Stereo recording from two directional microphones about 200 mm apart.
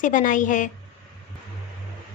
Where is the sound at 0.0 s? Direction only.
40° left (ahead or behind).